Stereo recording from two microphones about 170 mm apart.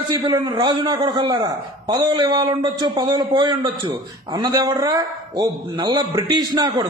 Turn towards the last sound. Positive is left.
turn(degrees=-25)  # may be behind; listen again after turning